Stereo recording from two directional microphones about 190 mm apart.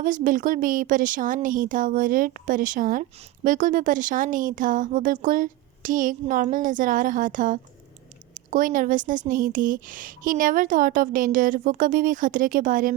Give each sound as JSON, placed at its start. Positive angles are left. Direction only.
{"t": 0.0, "sound": "a woman's voice", "side_deg": -45}